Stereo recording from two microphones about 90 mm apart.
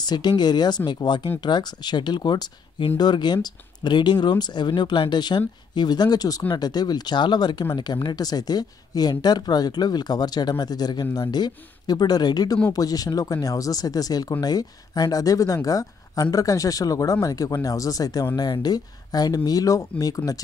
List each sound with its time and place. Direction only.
0.0 s speech: 50° left (ahead or behind)